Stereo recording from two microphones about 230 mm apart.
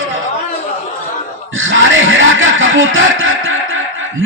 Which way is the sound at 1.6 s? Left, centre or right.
Right.